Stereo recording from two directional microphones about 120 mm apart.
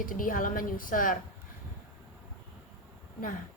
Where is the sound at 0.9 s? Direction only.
90° left.